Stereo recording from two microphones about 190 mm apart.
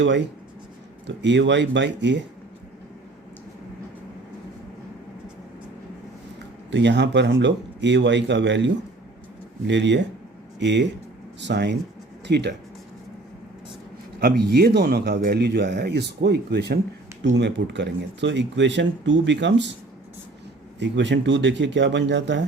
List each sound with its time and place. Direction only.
1.0 s speech: 70° right (ahead or behind)
6.7 s speech: 65° right (ahead or behind)
14.2 s speech: 55° right (ahead or behind)
20.7 s speech: 70° right (ahead or behind)